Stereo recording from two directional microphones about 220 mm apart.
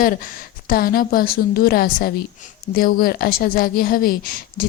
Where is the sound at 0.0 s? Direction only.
40° left (ahead or behind).